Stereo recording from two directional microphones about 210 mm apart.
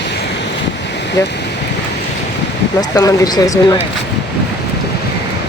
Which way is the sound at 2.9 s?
15° left (ahead or behind).